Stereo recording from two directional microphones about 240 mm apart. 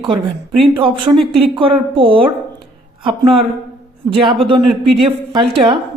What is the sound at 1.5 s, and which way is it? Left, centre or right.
Speech, right.